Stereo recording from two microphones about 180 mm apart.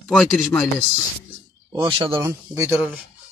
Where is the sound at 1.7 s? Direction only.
25° right (ahead or behind).